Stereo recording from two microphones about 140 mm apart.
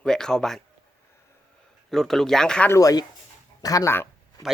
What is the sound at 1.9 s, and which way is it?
Speech, 5° left (ahead or behind).